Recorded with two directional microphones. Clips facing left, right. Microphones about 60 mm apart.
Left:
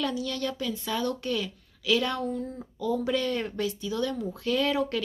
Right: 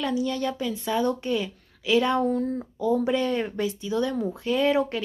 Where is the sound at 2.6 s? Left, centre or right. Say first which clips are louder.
Right 5 dB; right.